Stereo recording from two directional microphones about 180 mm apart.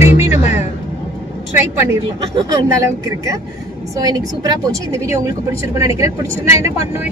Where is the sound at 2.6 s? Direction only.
20° right (ahead or behind).